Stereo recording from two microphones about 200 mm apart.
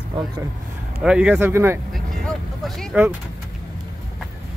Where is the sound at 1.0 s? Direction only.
5° right (ahead or behind).